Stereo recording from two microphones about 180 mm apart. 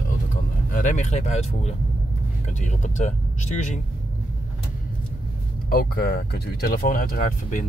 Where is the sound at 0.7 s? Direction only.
45° left (ahead or behind).